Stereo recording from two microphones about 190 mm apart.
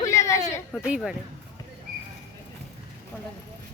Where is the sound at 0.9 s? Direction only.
5° right (ahead or behind).